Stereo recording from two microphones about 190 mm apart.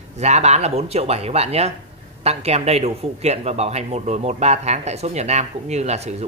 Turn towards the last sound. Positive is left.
turn(degrees=-35)  # may be behind; listen again after turning